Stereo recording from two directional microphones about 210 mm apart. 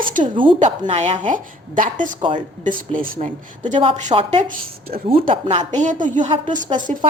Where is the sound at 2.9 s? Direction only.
40° right (ahead or behind).